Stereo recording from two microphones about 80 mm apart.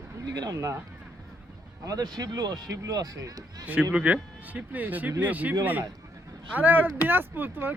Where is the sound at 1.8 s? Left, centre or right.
Right.